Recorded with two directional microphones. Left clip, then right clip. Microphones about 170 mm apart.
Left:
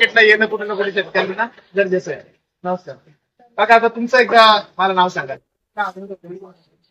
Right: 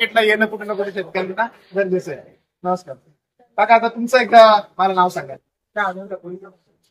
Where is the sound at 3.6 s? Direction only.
35° right (ahead or behind).